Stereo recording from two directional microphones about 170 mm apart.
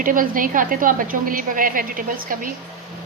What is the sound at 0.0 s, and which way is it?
A woman's voice, 55° right (ahead or behind).